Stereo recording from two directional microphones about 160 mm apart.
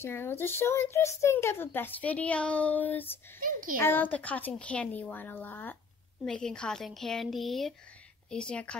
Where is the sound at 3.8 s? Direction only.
10° left (ahead or behind).